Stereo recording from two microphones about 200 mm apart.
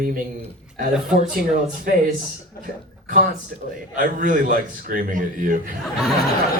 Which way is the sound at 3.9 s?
40° right (ahead or behind).